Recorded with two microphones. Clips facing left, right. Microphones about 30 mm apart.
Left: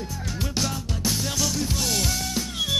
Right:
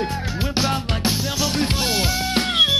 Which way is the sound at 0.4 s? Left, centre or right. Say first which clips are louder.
Right 6 dB; right.